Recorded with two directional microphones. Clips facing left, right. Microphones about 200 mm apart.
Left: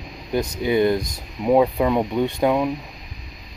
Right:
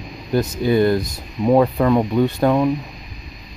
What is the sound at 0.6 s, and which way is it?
Speech, 20° left (ahead or behind).